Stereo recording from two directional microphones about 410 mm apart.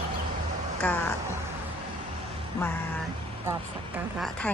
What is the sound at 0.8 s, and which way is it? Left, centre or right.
Speech, centre.